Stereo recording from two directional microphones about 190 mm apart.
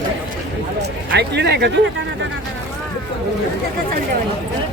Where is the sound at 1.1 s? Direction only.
65° right (ahead or behind).